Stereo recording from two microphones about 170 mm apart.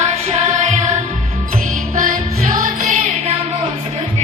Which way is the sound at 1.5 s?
50° right (ahead or behind).